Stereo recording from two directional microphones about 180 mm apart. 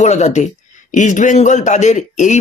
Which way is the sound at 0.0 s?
40° left (ahead or behind).